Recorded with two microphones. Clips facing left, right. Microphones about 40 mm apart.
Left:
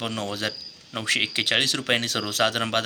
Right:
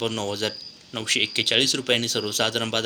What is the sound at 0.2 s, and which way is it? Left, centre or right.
Speech, centre.